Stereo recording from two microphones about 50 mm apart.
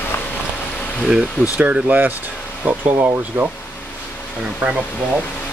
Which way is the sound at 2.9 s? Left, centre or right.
Right.